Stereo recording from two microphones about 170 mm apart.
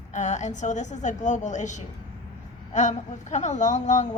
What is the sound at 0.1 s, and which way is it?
A woman's voice, 45° left (ahead or behind).